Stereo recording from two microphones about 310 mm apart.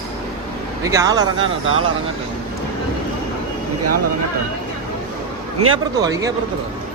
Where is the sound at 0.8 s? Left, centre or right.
Centre.